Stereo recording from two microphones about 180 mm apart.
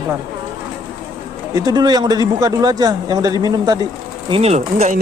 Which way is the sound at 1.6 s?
20° right (ahead or behind).